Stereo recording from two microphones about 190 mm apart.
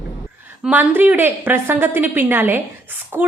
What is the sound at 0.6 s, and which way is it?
A woman's voice, 10° right (ahead or behind).